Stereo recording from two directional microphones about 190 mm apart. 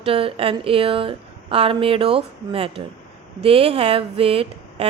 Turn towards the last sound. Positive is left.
turn(degrees=-30)  # may be behind; listen again after turning